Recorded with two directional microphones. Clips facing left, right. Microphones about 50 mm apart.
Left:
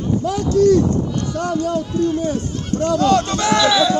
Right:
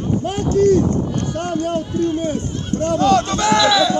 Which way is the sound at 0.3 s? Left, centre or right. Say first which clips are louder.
Left 1 dB; right.